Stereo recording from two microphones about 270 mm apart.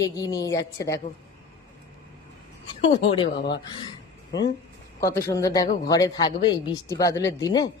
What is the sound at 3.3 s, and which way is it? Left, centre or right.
Speech, left.